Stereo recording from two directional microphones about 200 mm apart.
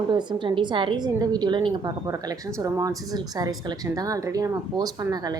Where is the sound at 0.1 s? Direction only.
25° right (ahead or behind).